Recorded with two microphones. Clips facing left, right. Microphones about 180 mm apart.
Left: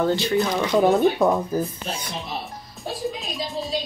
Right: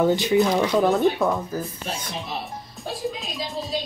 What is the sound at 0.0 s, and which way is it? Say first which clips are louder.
Speech: right 2 dB; 15° right (ahead or behind).